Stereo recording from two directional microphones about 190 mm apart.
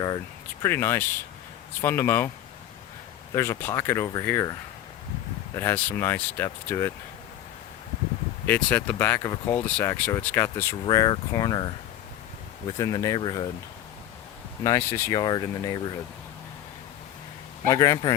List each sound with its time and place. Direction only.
0.6 s speech: 15° left (ahead or behind)
3.3 s speech: 15° left (ahead or behind)
5.5 s speech: 10° left (ahead or behind)
8.4 s speech: 10° left (ahead or behind)
10.8 s speech: 20° left (ahead or behind)
12.7 s speech: 20° left (ahead or behind)
14.6 s speech: 15° left (ahead or behind)
17.7 s speech: 20° left (ahead or behind)